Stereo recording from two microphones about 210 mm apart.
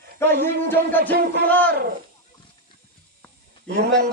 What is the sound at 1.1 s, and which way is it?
Speech, 50° right (ahead or behind).